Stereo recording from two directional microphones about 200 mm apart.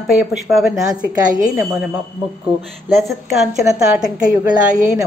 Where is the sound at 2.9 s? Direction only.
Centre (ahead or behind).